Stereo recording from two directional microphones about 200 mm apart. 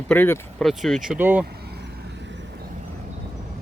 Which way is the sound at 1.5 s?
55° right (ahead or behind).